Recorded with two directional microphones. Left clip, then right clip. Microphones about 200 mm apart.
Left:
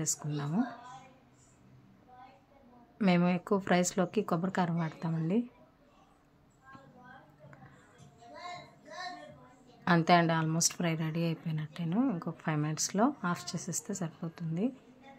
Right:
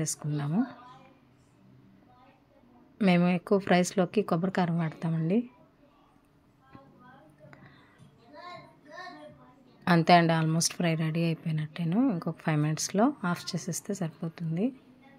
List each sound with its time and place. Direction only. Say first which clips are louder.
0.0 s a woman's voice: right 2 dB; 15° right (ahead or behind)
3.0 s a woman's voice: right 3 dB; 10° right (ahead or behind)
9.8 s a woman's voice: right 4 dB; 15° right (ahead or behind)